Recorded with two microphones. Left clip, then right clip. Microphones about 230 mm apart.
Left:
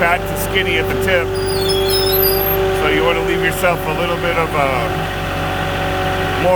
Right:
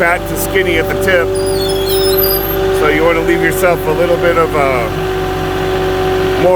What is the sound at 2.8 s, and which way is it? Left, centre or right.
Speech, right.